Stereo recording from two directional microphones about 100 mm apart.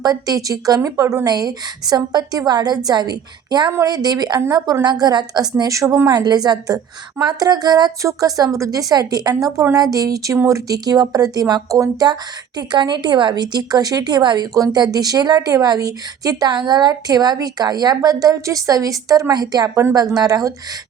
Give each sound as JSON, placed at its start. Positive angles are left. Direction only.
{"t": 0.0, "sound": "a woman's voice", "side_deg": -40}
{"t": 6.1, "sound": "a woman's voice", "side_deg": -45}